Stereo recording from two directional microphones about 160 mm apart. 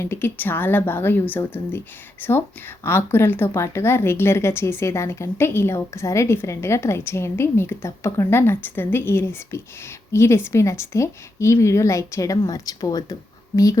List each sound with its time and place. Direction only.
0.0 s a woman's voice: 15° left (ahead or behind)